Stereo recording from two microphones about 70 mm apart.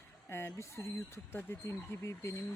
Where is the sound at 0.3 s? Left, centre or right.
Left.